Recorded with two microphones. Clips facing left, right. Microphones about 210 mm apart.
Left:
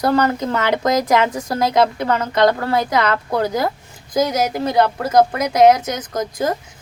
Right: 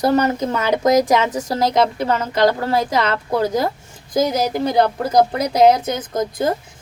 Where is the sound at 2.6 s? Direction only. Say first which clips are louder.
Even; 20° right (ahead or behind).